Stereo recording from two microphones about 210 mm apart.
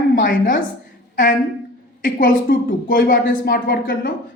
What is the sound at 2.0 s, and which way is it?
A woman's voice, 40° left (ahead or behind).